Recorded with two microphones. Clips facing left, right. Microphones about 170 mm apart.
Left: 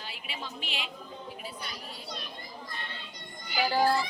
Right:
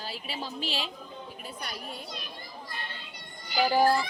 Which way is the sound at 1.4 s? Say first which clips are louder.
Right 2 dB; 50° right (ahead or behind).